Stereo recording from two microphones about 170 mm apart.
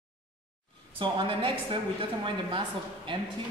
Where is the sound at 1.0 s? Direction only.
30° right (ahead or behind).